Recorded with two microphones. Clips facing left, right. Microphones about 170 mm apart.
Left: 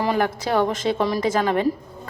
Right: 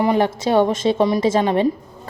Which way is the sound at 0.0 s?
20° right (ahead or behind).